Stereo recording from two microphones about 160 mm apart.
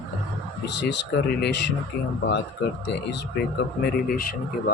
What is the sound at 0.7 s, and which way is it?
Speech, 90° left.